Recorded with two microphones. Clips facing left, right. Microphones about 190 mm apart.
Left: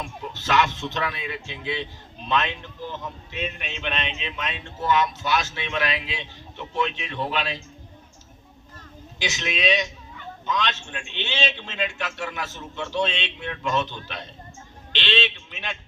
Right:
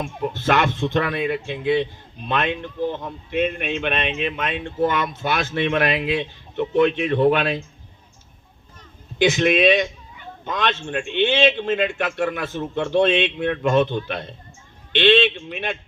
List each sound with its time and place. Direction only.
0.0 s speech: 55° right (ahead or behind)
9.1 s speech: 55° right (ahead or behind)